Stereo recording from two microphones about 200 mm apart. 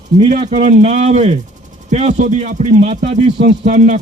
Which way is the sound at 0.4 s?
30° right (ahead or behind).